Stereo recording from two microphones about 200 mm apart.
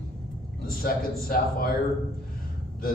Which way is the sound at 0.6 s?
50° left (ahead or behind).